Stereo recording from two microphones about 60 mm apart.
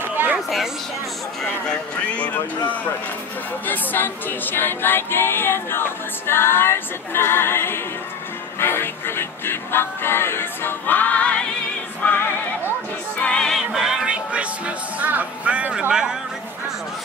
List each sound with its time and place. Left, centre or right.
1.7 s speech: left
13.2 s music: centre
13.6 s music: centre
15.0 s speech: right